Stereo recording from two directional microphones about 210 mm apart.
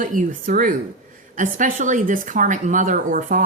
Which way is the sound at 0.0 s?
40° right (ahead or behind).